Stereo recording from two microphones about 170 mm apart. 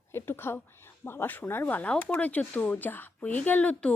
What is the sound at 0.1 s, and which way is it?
Speech, 15° left (ahead or behind).